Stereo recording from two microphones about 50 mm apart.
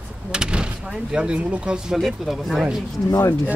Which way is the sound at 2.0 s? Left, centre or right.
Centre.